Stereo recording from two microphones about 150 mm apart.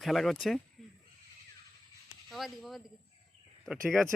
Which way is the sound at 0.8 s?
Centre (ahead or behind).